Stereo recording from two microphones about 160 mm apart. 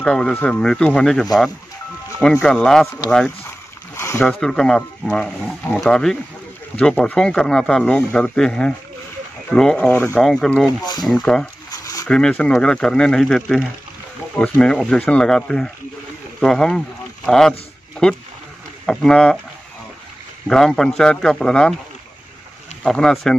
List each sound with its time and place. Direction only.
0.0 s speech: 5° left (ahead or behind)
3.9 s a sound: 20° left (ahead or behind)
4.2 s speech: 5° left (ahead or behind)
10.8 s speech: 25° left (ahead or behind)
11.1 s speech: 5° left (ahead or behind)
11.7 s a sound: 20° left (ahead or behind)
12.1 s speech: 5° left (ahead or behind)
17.3 s a sound: 5° left (ahead or behind)
18.9 s speech: 5° left (ahead or behind)
20.4 s speech: 5° left (ahead or behind)
22.8 s speech: 5° left (ahead or behind)